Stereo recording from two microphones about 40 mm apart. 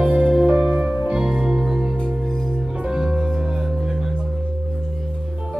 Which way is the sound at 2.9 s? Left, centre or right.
Centre.